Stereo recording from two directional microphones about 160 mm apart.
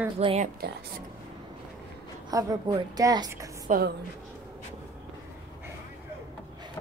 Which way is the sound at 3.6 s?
65° right (ahead or behind).